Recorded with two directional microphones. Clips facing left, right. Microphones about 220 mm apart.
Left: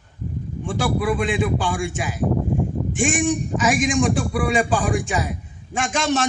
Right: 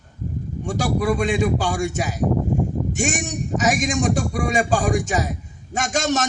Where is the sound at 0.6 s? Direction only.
40° right (ahead or behind).